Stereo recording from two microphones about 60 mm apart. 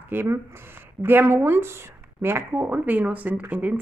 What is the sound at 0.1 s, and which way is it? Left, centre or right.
Speech, right.